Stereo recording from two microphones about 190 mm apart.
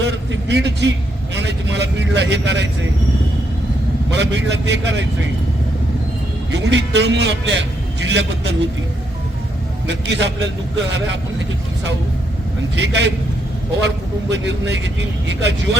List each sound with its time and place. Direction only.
0.0 s a man's voice: 65° right (ahead or behind)
4.1 s a man's voice: 65° right (ahead or behind)
6.5 s a man's voice: 70° right (ahead or behind)
9.8 s a man's voice: 65° right (ahead or behind)
12.7 s a man's voice: 65° right (ahead or behind)